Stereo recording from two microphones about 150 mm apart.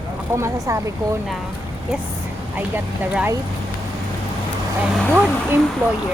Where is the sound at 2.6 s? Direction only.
10° right (ahead or behind).